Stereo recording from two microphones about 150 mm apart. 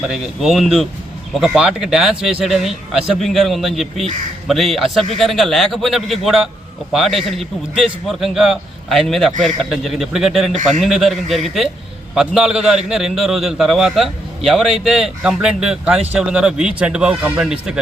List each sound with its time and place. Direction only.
0.0 s a man's voice: 5° right (ahead or behind)